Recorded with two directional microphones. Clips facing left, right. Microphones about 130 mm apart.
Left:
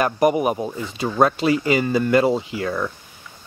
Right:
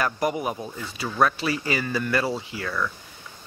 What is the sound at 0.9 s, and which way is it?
Speech, 40° left (ahead or behind).